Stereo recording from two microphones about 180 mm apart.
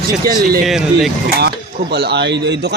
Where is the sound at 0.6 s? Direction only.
Centre (ahead or behind).